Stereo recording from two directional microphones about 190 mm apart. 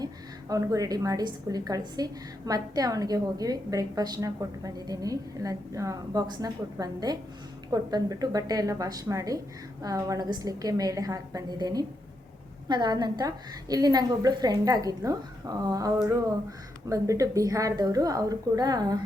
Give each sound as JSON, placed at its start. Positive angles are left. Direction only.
{"t": 0.0, "sound": "a woman's voice", "side_deg": -20}